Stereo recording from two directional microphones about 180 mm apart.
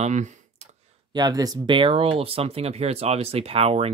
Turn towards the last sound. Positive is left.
turn(degrees=-35)  # may be behind; listen again after turning